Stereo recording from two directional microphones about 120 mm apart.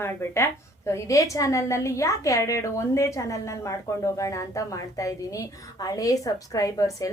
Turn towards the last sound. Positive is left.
turn(degrees=25)  # may be behind; listen again after turning